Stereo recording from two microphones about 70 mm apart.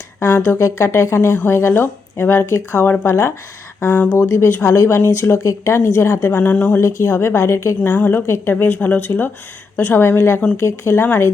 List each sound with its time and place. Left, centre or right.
0.2 s a sound: left
0.6 s a woman's voice: left
6.3 s a woman's voice: left
6.7 s a woman's voice: left
7.9 s a woman's voice: left